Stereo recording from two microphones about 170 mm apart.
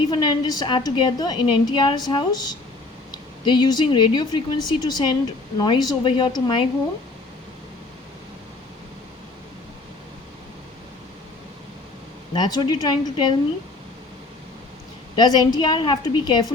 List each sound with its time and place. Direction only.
0.1 s a woman's voice: 25° left (ahead or behind)
12.3 s a woman's voice: 25° left (ahead or behind)
15.1 s a woman's voice: 25° left (ahead or behind)